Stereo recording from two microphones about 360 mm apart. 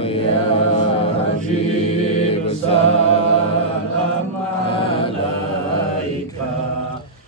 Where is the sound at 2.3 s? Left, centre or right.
Centre.